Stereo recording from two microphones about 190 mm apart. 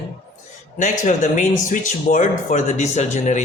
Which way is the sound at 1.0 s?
40° left (ahead or behind).